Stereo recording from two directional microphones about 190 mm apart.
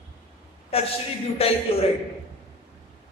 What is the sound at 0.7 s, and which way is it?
Speech, 30° left (ahead or behind).